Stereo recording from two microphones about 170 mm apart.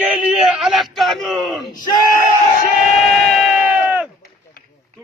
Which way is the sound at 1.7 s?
50° left (ahead or behind).